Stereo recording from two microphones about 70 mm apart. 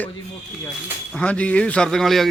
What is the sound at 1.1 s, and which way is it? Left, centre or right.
Speech, centre.